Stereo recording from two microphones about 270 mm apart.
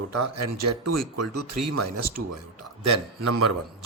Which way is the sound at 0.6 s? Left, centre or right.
Right.